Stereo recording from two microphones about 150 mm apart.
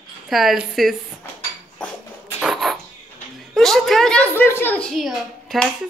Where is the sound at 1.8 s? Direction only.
5° left (ahead or behind).